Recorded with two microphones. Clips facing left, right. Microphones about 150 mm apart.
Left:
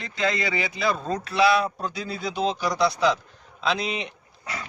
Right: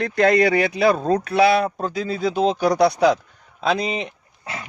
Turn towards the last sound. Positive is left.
turn(degrees=-25)  # may be behind; listen again after turning